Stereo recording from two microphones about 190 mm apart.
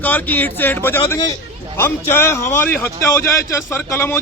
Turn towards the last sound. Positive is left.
turn(degrees=15)  # may be behind; listen again after turning